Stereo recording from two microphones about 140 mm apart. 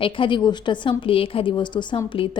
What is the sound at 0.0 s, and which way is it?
A woman's voice, 35° left (ahead or behind).